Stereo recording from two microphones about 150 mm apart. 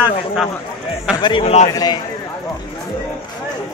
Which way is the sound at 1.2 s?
35° left (ahead or behind).